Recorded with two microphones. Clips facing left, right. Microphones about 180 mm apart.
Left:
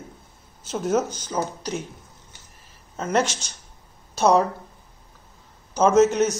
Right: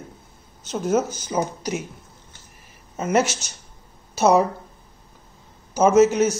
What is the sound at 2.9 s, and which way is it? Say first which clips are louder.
Speech: right 2 dB; 10° right (ahead or behind).